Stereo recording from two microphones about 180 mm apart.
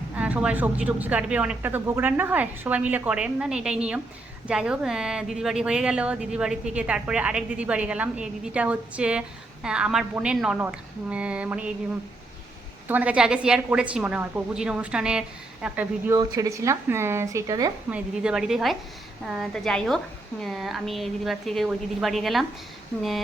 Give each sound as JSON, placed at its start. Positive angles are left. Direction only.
{"t": 0.2, "sound": "speech", "side_deg": -5}
{"t": 12.9, "sound": "speech", "side_deg": -10}
{"t": 16.1, "sound": "speech", "side_deg": -20}
{"t": 17.9, "sound": "speech", "side_deg": -5}